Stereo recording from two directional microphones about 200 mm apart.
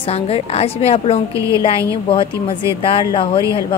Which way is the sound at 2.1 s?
25° left (ahead or behind).